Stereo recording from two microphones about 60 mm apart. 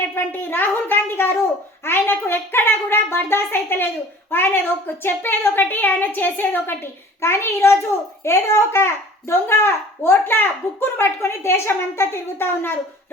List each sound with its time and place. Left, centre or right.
0.2 s a child's voice: left
7.2 s a child's voice: left